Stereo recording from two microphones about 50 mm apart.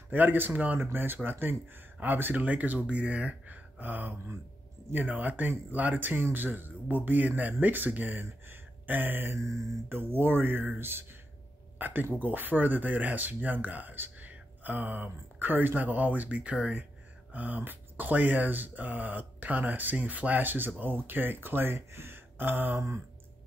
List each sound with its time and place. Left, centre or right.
0.1 s speech: right